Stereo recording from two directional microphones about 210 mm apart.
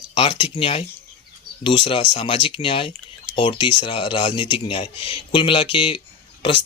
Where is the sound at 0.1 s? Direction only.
25° left (ahead or behind).